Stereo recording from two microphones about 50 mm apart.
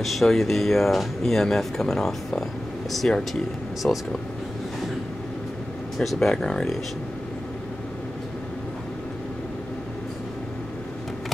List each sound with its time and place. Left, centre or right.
0.0 s speech: centre
3.8 s speech: left
6.1 s speech: centre